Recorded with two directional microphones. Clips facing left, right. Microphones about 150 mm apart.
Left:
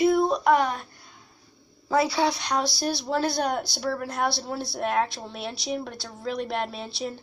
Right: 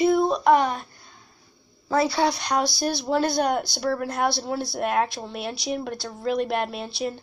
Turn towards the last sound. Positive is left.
turn(degrees=-5)  # may be behind; listen again after turning